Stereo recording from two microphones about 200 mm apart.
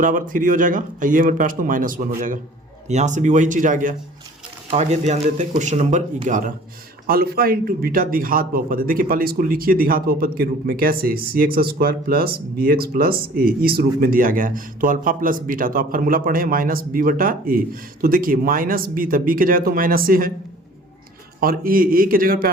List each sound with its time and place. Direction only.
0.0 s a man's voice: 40° right (ahead or behind)
21.4 s a man's voice: 45° right (ahead or behind)